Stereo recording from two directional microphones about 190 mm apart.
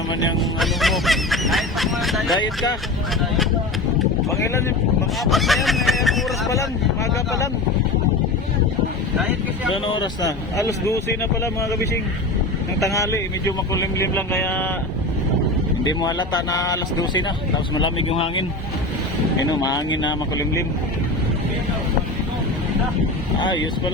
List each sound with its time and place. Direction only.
0.6 s speech: centre (ahead or behind)
4.3 s speech: 15° left (ahead or behind)
5.2 s speech: centre (ahead or behind)
9.7 s speech: 25° left (ahead or behind)
12.8 s speech: 15° left (ahead or behind)
15.8 s speech: 20° left (ahead or behind)
19.5 s speech: 20° left (ahead or behind)